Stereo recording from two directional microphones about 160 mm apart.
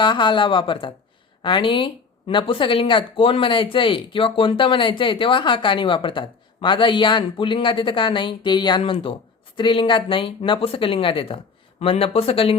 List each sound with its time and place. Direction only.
0.0 s speech: 30° left (ahead or behind)